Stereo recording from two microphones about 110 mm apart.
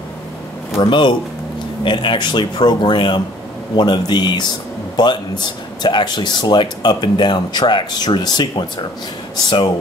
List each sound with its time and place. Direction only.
0.7 s a man's voice: 45° left (ahead or behind)